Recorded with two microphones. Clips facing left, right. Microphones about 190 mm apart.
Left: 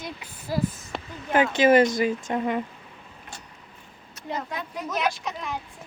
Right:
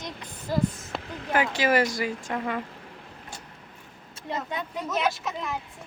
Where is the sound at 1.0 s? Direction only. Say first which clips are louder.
Right 2 dB; 60° right (ahead or behind).